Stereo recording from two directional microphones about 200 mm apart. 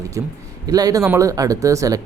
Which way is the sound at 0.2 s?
15° right (ahead or behind).